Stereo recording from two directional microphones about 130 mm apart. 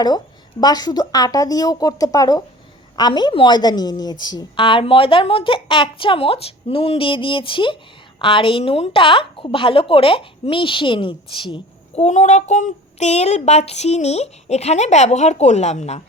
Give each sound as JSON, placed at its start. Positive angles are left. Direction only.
{"t": 0.6, "sound": "a woman's voice", "side_deg": 30}
{"t": 12.0, "sound": "child singing", "side_deg": 65}